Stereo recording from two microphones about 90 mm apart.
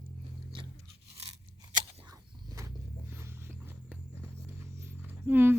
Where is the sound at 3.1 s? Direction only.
30° right (ahead or behind).